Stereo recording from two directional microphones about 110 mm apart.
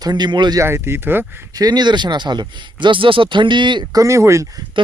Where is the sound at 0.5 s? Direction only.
25° right (ahead or behind).